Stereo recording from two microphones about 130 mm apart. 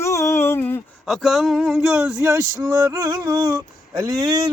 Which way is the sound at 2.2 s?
20° right (ahead or behind).